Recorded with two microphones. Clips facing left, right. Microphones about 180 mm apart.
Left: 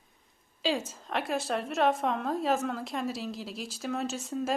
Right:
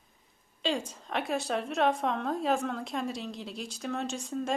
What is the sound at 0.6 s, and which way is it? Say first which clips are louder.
A woman's voice: left 1 dB; 5° left (ahead or behind).